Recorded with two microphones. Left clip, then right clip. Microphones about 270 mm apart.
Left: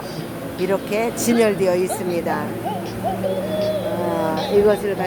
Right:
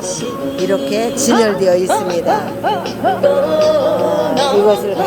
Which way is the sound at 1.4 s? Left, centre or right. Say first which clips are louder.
Right 4 dB; centre.